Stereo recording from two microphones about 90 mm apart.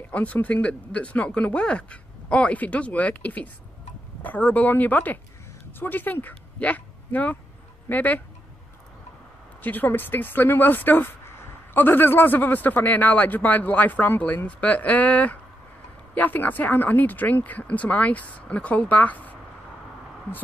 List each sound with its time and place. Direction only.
0.1 s speech: 15° left (ahead or behind)
9.6 s speech: 20° left (ahead or behind)